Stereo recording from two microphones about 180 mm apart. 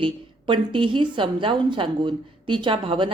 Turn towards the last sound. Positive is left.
turn(degrees=-30)  # may be behind; listen again after turning